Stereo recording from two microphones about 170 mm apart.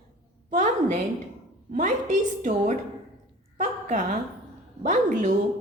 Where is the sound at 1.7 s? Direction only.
45° right (ahead or behind).